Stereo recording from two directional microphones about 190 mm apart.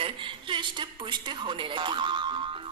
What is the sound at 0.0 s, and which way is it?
A woman's voice, 25° right (ahead or behind).